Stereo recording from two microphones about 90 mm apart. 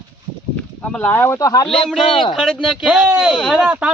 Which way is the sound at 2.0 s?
65° left (ahead or behind).